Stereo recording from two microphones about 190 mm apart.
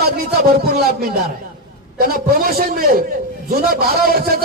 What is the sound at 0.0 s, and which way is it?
Speech, 55° right (ahead or behind).